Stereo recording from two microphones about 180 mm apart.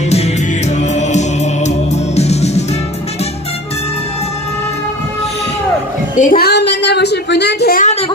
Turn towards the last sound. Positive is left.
turn(degrees=65)  # may be behind; listen again after turning